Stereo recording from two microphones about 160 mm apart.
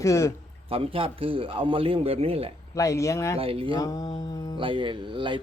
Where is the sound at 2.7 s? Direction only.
20° left (ahead or behind).